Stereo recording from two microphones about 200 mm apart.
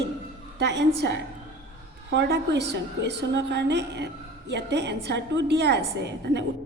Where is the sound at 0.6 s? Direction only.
60° right (ahead or behind).